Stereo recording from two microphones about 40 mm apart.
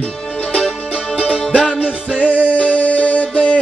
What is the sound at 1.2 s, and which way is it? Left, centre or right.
Music, right.